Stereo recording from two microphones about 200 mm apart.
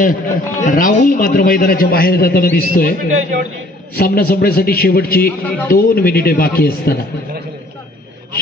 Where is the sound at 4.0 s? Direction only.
50° left (ahead or behind).